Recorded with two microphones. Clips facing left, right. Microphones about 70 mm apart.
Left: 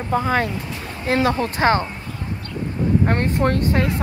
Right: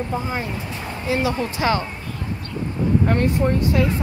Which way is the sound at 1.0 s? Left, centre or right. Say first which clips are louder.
Left 3 dB; left.